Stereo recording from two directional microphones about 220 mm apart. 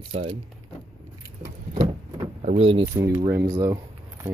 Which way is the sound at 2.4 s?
25° right (ahead or behind).